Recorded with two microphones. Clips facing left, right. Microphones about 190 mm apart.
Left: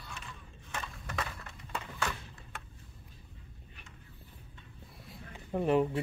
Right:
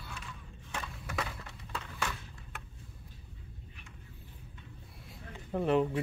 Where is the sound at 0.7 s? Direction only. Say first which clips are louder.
Right 1 dB; 5° right (ahead or behind).